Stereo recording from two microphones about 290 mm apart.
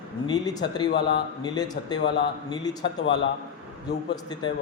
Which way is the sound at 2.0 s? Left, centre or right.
Left.